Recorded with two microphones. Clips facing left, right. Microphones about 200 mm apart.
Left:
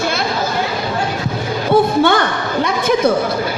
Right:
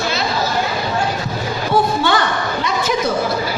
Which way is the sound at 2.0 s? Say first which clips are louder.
Left 4 dB; 55° left (ahead or behind).